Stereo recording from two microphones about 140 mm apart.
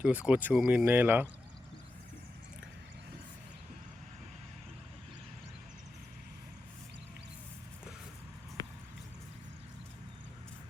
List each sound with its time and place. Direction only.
0.0 s speech: 10° right (ahead or behind)
0.9 s speech: 15° right (ahead or behind)
8.6 s a sound: 30° left (ahead or behind)